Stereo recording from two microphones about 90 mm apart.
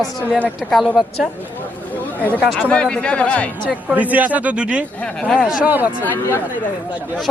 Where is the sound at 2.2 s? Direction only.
15° left (ahead or behind).